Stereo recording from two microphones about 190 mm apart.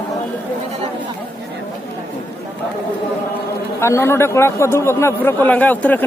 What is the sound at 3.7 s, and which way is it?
Speech, 15° left (ahead or behind).